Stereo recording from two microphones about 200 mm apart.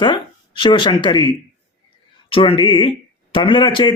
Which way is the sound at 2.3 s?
25° left (ahead or behind).